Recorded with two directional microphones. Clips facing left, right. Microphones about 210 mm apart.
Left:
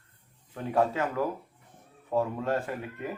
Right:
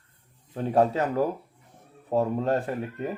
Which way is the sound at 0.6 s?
35° right (ahead or behind).